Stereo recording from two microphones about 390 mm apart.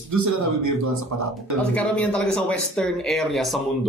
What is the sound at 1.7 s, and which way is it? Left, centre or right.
Speech, centre.